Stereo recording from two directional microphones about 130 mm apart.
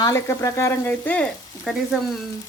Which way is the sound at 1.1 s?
5° left (ahead or behind).